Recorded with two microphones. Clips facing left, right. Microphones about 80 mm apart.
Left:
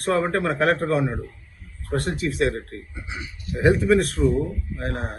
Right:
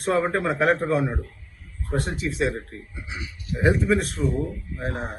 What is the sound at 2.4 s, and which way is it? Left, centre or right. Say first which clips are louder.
Speech: left 2 dB; centre.